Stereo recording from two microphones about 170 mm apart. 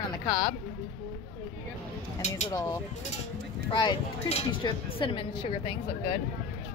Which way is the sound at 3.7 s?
35° left (ahead or behind).